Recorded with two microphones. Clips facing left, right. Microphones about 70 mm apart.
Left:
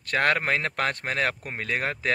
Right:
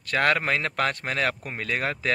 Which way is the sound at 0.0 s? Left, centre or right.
Left.